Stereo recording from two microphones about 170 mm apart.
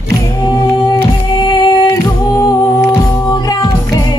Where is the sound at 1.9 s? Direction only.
20° left (ahead or behind).